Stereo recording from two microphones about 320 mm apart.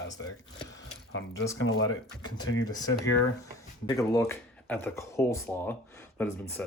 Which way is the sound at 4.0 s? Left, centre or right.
Centre.